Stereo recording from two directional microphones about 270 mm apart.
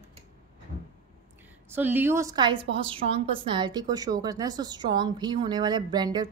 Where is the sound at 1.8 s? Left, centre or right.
Centre.